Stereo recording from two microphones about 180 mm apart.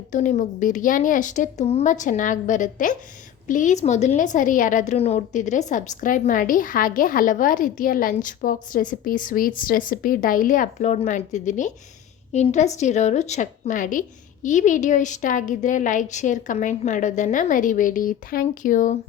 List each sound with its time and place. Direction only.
0.1 s a woman's voice: 45° left (ahead or behind)